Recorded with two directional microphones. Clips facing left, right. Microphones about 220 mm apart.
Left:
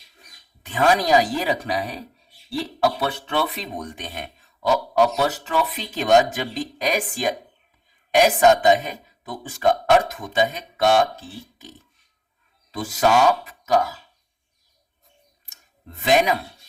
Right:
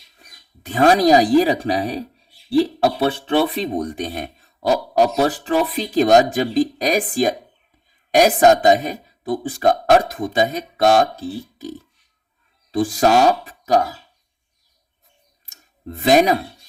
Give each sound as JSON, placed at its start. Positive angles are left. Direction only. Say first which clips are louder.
{"t": 0.6, "sound": "speech", "louder": "right 6 dB", "side_deg": -40}
{"t": 12.7, "sound": "speech", "louder": "right 4 dB", "side_deg": -30}
{"t": 15.4, "sound": "a sound", "louder": "right 12 dB", "side_deg": -35}